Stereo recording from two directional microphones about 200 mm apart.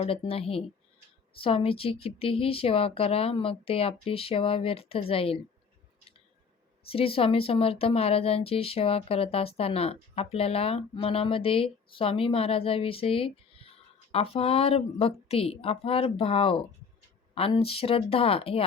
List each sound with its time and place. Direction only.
0.0 s speech: 30° left (ahead or behind)
6.8 s speech: 30° left (ahead or behind)